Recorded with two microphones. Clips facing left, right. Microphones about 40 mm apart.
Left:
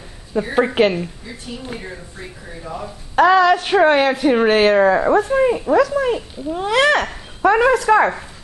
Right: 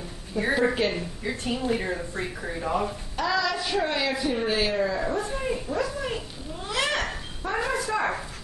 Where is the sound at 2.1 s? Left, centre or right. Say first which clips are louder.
Right 3 dB; right.